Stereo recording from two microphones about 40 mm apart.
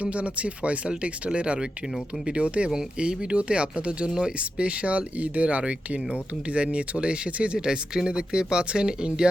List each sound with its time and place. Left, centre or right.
0.0 s speech: right